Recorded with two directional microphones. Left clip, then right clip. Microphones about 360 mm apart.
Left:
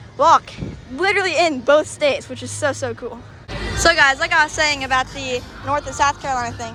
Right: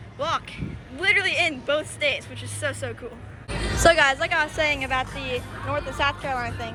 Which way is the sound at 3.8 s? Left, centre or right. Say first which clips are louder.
Left 4 dB; centre.